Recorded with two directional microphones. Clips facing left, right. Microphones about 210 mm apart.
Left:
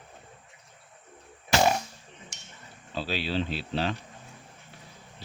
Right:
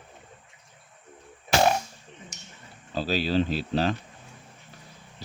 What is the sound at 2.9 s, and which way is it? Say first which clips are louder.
Speech: right 5 dB; 40° right (ahead or behind).